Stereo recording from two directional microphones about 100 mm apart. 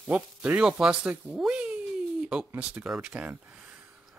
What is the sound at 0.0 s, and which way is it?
Speech, 15° right (ahead or behind).